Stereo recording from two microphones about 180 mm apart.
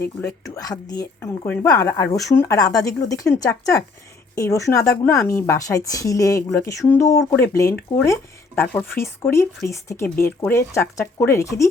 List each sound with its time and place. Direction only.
0.2 s a woman's voice: 15° left (ahead or behind)